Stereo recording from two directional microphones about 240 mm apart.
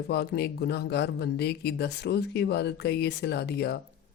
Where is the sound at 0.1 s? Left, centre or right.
Left.